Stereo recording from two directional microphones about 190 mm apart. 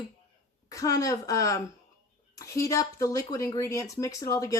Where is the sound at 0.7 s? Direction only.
15° left (ahead or behind).